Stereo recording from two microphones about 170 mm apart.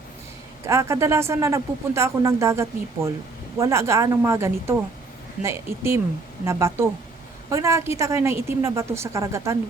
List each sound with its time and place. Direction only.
0.6 s a man's voice: 15° right (ahead or behind)